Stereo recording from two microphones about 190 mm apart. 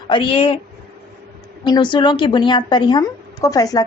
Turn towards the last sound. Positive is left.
turn(degrees=20)  # may be behind; listen again after turning